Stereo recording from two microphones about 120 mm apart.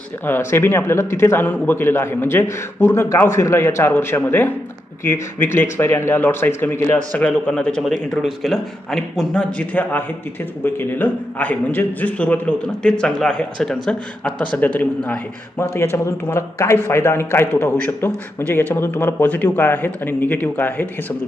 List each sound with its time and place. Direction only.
0.3 s a man's voice: 20° left (ahead or behind)
15.6 s a man's voice: 20° left (ahead or behind)